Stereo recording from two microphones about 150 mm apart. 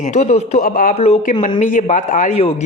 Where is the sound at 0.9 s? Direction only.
45° left (ahead or behind).